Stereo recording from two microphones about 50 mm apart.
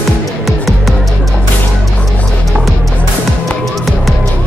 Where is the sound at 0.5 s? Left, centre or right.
Centre.